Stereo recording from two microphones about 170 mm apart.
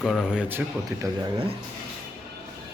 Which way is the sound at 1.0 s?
20° right (ahead or behind).